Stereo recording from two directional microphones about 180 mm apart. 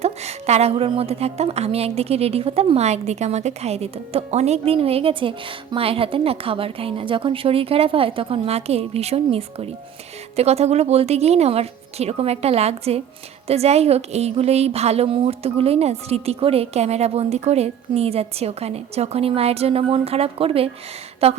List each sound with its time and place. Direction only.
0.0 s a woman's voice: 35° right (ahead or behind)